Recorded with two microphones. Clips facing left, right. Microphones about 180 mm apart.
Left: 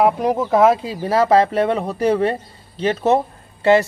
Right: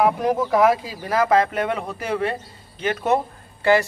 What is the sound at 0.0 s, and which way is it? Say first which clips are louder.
Speech: left 2 dB; 25° left (ahead or behind).